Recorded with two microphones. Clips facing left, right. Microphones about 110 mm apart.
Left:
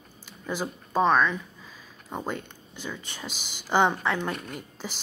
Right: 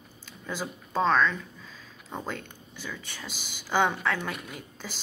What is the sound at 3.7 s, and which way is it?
Speech, 15° left (ahead or behind).